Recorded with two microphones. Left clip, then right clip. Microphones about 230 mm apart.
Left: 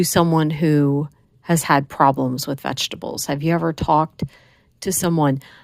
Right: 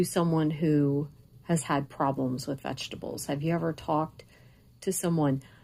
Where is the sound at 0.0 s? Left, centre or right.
Left.